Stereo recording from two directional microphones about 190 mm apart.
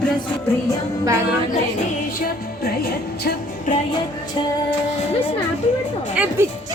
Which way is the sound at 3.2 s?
55° left (ahead or behind).